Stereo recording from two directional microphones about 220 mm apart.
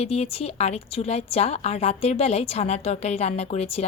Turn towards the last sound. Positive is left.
turn(degrees=30)  # may be behind; listen again after turning